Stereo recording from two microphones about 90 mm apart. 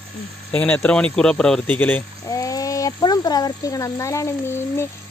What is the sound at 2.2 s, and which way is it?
Speech, 40° left (ahead or behind).